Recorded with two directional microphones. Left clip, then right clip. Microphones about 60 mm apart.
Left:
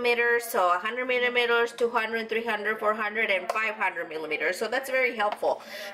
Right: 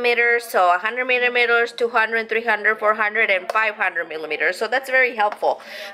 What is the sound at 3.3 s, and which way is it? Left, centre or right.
Speech, left.